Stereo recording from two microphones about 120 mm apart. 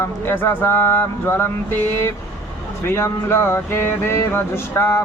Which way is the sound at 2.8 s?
20° left (ahead or behind).